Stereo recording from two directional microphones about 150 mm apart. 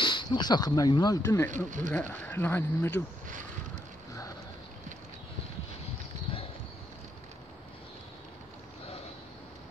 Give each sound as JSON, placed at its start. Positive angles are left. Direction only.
{"t": 0.0, "sound": "speech", "side_deg": 30}
{"t": 1.7, "sound": "speech", "side_deg": -60}
{"t": 2.0, "sound": "speech", "side_deg": 15}